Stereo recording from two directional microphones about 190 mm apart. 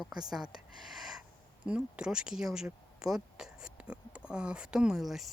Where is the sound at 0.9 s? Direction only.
Centre (ahead or behind).